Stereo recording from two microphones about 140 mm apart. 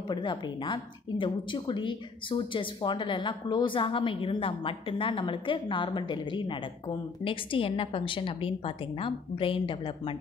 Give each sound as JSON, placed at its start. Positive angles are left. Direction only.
{"t": 0.1, "sound": "a woman's voice", "side_deg": 35}